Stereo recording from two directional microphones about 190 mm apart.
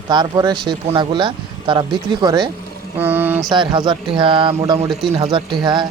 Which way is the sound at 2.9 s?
10° right (ahead or behind).